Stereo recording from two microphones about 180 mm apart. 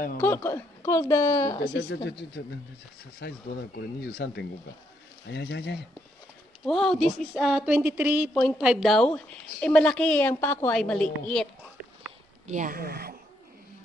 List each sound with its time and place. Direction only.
0.2 s a woman's voice: 15° left (ahead or behind)
2.0 s speech: 70° left (ahead or behind)
6.6 s a woman's voice: centre (ahead or behind)
12.4 s a woman's voice: 45° right (ahead or behind)